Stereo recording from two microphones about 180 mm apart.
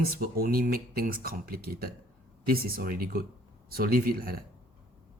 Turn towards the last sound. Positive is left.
turn(degrees=-55)  # may be behind; listen again after turning